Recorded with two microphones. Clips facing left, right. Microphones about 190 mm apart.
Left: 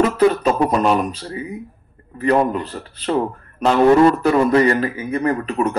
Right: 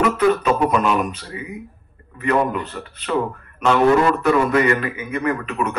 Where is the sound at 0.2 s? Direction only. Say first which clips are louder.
Left 2 dB; 35° left (ahead or behind).